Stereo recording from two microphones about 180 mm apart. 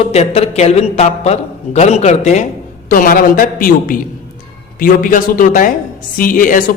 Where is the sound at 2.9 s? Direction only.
50° left (ahead or behind).